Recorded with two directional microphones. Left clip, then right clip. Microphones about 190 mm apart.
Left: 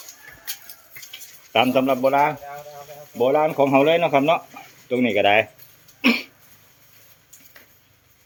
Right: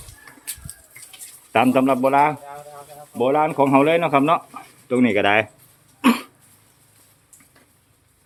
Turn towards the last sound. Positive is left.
turn(degrees=-15)  # may be behind; listen again after turning